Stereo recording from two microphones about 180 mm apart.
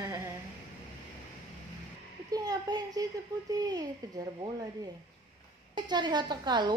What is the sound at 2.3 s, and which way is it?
Speech, 20° right (ahead or behind).